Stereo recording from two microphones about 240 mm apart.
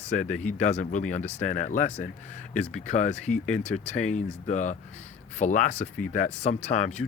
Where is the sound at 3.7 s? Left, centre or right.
Left.